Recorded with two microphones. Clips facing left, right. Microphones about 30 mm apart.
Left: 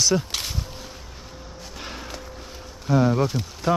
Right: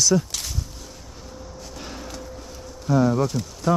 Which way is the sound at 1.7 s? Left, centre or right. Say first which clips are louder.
Left 1 dB; left.